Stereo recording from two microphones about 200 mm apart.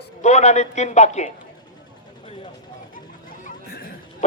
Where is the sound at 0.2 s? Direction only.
35° left (ahead or behind).